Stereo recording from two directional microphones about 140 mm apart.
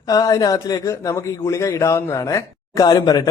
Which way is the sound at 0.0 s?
25° left (ahead or behind).